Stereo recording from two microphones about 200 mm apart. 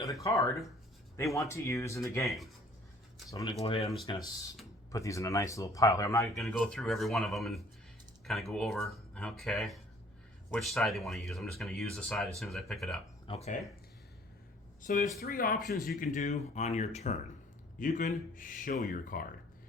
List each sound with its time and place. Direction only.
0.0 s a sound: 15° left (ahead or behind)
1.1 s speech: 15° left (ahead or behind)
3.6 s speech: 30° left (ahead or behind)
4.0 s speech: 20° left (ahead or behind)
6.3 s speech: centre (ahead or behind)
13.2 s speech: 30° left (ahead or behind)
14.8 s speech: 40° left (ahead or behind)
16.1 s speech: 35° left (ahead or behind)